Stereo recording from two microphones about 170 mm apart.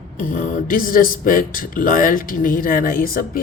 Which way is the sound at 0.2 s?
50° left (ahead or behind).